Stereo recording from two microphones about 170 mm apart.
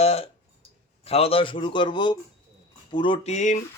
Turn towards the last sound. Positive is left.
turn(degrees=45)  # may be behind; listen again after turning